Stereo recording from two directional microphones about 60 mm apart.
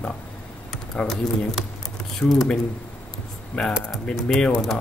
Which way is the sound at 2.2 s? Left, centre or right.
Left.